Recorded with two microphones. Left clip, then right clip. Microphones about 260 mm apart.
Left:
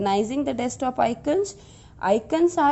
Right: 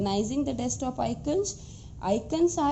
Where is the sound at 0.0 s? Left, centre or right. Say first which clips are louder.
Left 6 dB; left.